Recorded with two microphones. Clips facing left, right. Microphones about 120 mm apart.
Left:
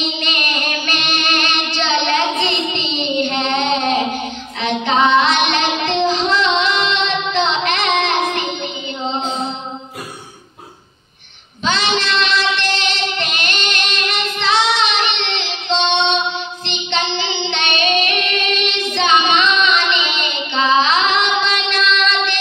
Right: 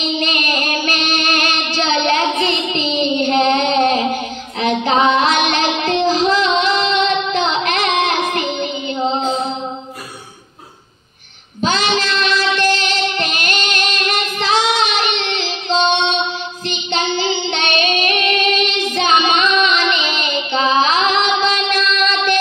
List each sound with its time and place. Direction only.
0.2 s child singing: 40° right (ahead or behind)
11.6 s child singing: 40° right (ahead or behind)